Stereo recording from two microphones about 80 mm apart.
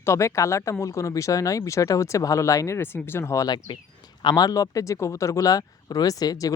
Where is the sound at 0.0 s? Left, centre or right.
Left.